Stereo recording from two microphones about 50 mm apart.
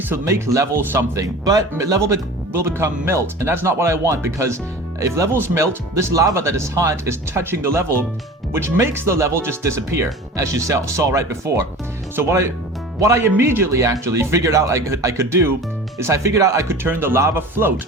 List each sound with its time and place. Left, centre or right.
0.3 s speech: right
2.5 s speech: right
5.3 s speech: right
9.1 s speech: right
9.4 s speech: right
12.1 s speech: right
13.0 s speech: right
13.4 s speech: right
16.8 s speech: right